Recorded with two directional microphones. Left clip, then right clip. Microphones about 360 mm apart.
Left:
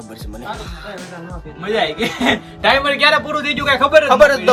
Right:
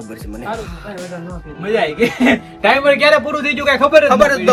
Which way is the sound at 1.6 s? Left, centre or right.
Centre.